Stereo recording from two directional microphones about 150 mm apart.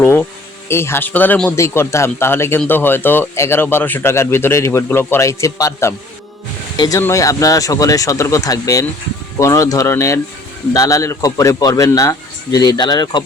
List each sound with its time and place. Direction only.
0.0 s a man's voice: 15° left (ahead or behind)